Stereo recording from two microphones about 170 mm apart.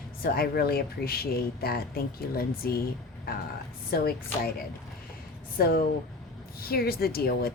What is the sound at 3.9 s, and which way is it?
Speech, 65° left (ahead or behind).